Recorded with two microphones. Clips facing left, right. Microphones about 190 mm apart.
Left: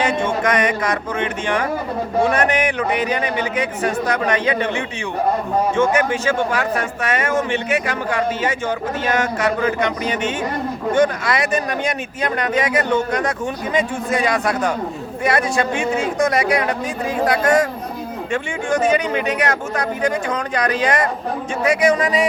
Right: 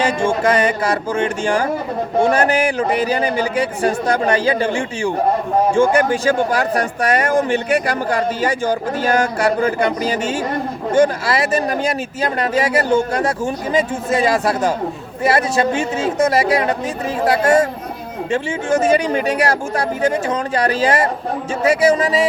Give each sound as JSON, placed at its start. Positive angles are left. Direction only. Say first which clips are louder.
{"t": 0.2, "sound": "speech", "louder": "right 3 dB", "side_deg": -30}
{"t": 5.7, "sound": "speech", "louder": "right 3 dB", "side_deg": -30}